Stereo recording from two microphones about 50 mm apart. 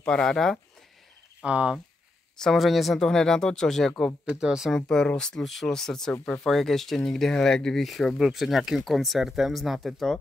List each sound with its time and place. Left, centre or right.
0.0 s speech: centre
1.4 s speech: right
2.5 s speech: centre
4.3 s speech: centre
4.8 s speech: centre
7.8 s speech: centre